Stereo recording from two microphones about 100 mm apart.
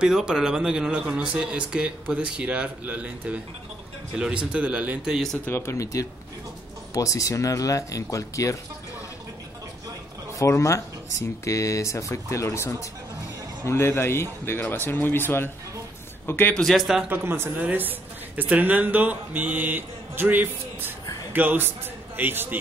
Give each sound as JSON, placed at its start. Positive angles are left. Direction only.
{"t": 0.0, "sound": "speech", "side_deg": -5}
{"t": 5.1, "sound": "speech", "side_deg": 5}
{"t": 5.4, "sound": "speech", "side_deg": 25}
{"t": 10.4, "sound": "speech", "side_deg": 30}
{"t": 16.5, "sound": "speech", "side_deg": 0}
{"t": 17.1, "sound": "a man's voice", "side_deg": -20}